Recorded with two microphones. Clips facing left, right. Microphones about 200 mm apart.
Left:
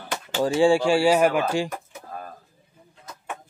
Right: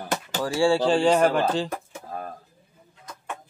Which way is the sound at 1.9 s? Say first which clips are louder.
Right 3 dB; 25° right (ahead or behind).